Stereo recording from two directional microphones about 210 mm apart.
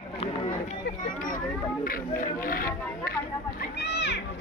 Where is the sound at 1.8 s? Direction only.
40° left (ahead or behind).